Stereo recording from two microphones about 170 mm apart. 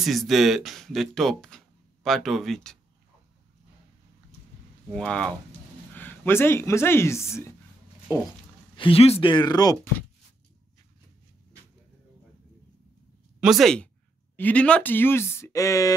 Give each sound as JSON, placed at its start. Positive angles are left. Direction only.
{"t": 0.0, "sound": "speech", "side_deg": 0}
{"t": 4.9, "sound": "speech", "side_deg": 5}
{"t": 8.7, "sound": "speech", "side_deg": 30}
{"t": 13.4, "sound": "speech", "side_deg": 0}